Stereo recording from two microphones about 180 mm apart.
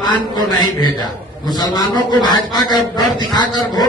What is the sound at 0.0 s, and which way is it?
A man's voice, 25° left (ahead or behind).